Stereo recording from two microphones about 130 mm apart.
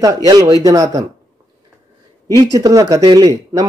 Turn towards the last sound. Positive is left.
turn(degrees=-30)  # may be behind; listen again after turning